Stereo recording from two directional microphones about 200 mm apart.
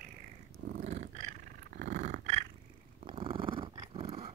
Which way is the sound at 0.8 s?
35° right (ahead or behind).